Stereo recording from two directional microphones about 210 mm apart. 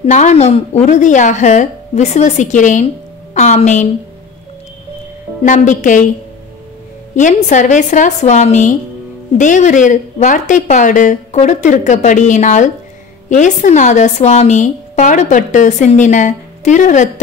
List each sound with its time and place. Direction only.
0.0 s speech: 35° left (ahead or behind)
5.4 s speech: 35° left (ahead or behind)
7.2 s speech: 35° left (ahead or behind)